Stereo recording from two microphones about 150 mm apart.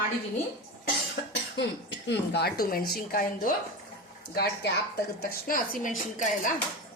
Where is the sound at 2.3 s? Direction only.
85° left.